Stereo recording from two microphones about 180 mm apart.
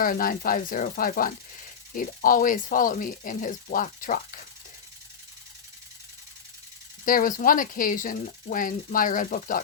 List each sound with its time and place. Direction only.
0.0 s speech: 50° left (ahead or behind)
7.0 s speech: 50° left (ahead or behind)